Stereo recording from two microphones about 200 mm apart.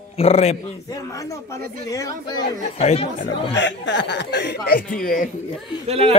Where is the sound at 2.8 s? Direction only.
30° left (ahead or behind).